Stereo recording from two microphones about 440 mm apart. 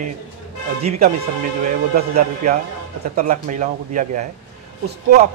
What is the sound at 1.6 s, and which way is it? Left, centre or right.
Speech, centre.